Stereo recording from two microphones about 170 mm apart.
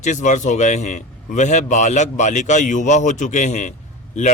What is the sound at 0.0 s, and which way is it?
A man's voice, 45° left (ahead or behind).